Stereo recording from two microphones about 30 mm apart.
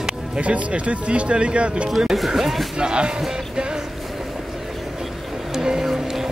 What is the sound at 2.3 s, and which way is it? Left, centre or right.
Speech, centre.